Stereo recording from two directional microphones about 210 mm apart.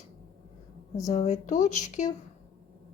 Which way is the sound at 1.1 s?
35° left (ahead or behind).